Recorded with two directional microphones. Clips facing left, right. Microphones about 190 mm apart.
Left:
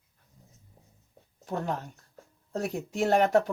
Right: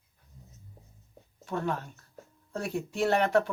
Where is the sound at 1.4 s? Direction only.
40° left (ahead or behind).